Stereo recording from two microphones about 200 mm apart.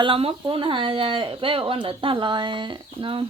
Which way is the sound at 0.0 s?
25° right (ahead or behind).